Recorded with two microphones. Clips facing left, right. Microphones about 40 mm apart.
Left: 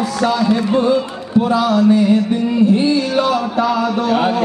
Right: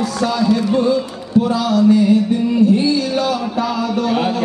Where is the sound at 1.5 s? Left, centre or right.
Left.